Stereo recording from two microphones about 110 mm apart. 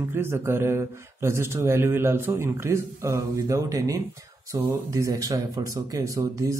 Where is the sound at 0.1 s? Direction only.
20° right (ahead or behind).